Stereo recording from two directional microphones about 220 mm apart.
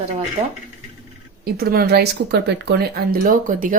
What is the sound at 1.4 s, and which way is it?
Speech, 45° right (ahead or behind).